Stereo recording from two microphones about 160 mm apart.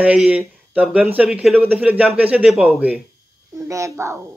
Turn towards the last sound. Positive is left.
turn(degrees=-20)  # may be behind; listen again after turning